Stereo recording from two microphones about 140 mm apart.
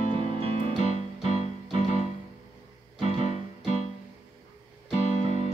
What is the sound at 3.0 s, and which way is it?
Music, 55° left (ahead or behind).